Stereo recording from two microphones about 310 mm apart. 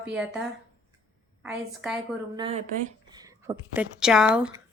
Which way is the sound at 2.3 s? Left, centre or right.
Centre.